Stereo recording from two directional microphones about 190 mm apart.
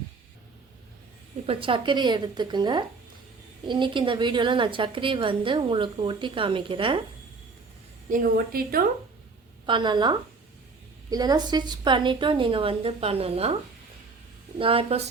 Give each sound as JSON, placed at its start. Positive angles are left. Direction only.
{"t": 1.5, "sound": "a woman's voice", "side_deg": -30}
{"t": 8.1, "sound": "a woman's voice", "side_deg": -50}
{"t": 9.6, "sound": "a woman's voice", "side_deg": -25}
{"t": 14.6, "sound": "a woman's voice", "side_deg": -30}